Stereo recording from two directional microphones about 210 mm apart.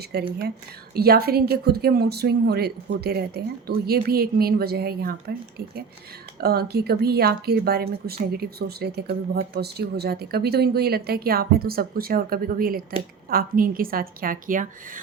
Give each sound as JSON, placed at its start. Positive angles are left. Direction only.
{"t": 0.1, "sound": "speech", "side_deg": -45}
{"t": 6.4, "sound": "speech", "side_deg": -50}